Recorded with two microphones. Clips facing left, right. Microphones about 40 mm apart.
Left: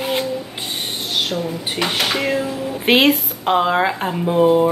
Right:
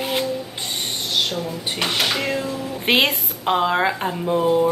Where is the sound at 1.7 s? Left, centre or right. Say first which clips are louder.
Left 1 dB; centre.